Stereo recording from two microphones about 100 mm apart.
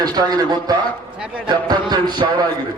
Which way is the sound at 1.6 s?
45° right (ahead or behind).